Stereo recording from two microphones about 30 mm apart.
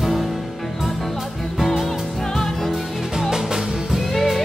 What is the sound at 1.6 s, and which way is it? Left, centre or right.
Music, centre.